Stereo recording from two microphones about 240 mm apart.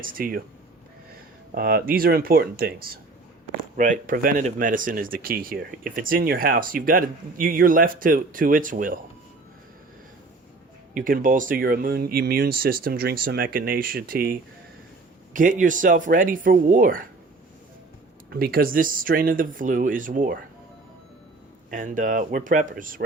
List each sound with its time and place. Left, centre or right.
0.0 s speech: right
1.5 s speech: right
10.9 s speech: right
18.3 s speech: right
21.7 s speech: right